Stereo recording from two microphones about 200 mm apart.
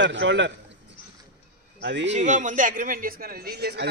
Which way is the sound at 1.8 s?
60° right (ahead or behind).